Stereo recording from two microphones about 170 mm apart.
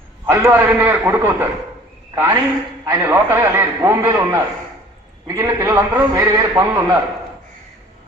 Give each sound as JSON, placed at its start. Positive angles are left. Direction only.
{"t": 0.3, "sound": "a man's voice", "side_deg": -15}